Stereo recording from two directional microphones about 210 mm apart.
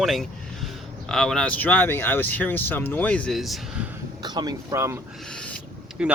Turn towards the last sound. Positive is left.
turn(degrees=-5)  # may be behind; listen again after turning